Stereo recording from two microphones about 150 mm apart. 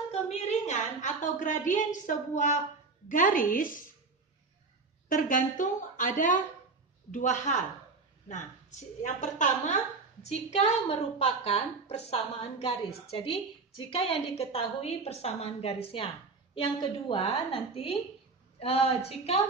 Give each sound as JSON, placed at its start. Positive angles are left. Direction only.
{"t": 0.3, "sound": "a woman's voice", "side_deg": 45}
{"t": 5.0, "sound": "a woman's voice", "side_deg": 65}